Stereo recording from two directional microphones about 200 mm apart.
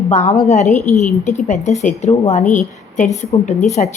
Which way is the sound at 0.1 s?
35° left (ahead or behind).